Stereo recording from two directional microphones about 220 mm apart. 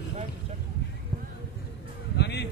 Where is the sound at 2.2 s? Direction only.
50° left (ahead or behind).